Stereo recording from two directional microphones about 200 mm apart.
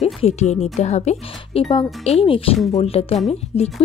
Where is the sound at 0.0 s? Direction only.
35° left (ahead or behind).